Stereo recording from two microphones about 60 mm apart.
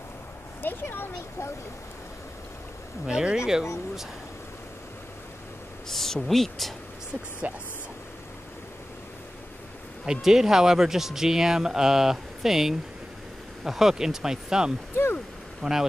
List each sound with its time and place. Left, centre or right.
0.6 s speech: left
3.1 s speech: centre
5.9 s speech: centre
7.4 s speech: right
10.0 s speech: centre